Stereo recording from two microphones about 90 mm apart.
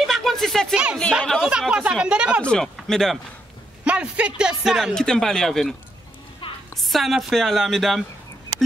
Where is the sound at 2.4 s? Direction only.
10° left (ahead or behind).